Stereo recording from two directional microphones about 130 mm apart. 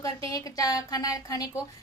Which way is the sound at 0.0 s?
25° left (ahead or behind).